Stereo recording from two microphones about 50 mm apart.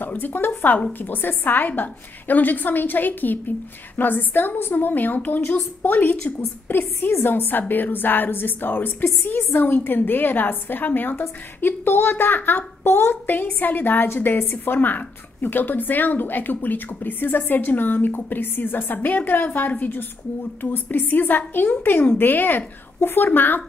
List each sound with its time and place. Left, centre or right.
0.0 s a woman's voice: left
7.1 s a woman's voice: left